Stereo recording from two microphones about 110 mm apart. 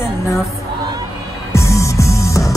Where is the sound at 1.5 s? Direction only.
25° left (ahead or behind).